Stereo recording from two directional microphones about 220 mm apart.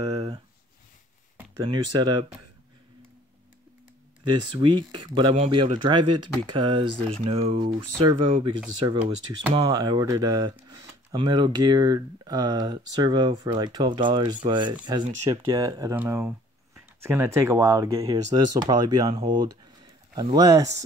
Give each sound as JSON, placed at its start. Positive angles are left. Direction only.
{"t": 0.0, "sound": "a sound", "side_deg": -20}
{"t": 1.5, "sound": "speech", "side_deg": -20}
{"t": 4.2, "sound": "speech", "side_deg": -20}
{"t": 6.0, "sound": "speech", "side_deg": -90}
{"t": 6.5, "sound": "speech", "side_deg": -25}